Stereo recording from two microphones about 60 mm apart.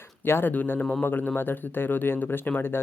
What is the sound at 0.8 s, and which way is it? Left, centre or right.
Speech, centre.